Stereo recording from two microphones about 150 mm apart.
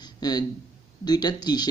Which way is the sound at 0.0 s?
25° left (ahead or behind).